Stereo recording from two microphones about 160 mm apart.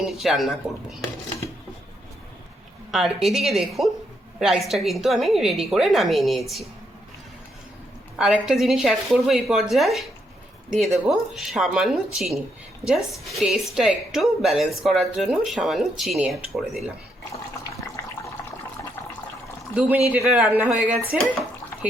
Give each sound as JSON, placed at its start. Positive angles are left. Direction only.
{"t": 0.0, "sound": "a woman's voice", "side_deg": 0}
{"t": 2.9, "sound": "a woman's voice", "side_deg": 0}
{"t": 8.1, "sound": "a woman's voice", "side_deg": -5}
{"t": 17.6, "sound": "water tap", "side_deg": 20}
{"t": 19.7, "sound": "speech", "side_deg": -5}